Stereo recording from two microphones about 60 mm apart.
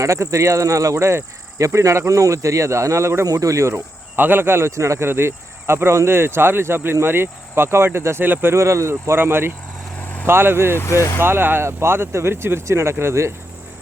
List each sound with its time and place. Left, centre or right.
0.0 s speech: right
3.2 s speech: right
4.2 s speech: right
4.7 s speech: right
8.5 s speech: right
10.0 s vehicle: left
10.2 s speech: right
10.8 s speech: left
11.2 s speech: right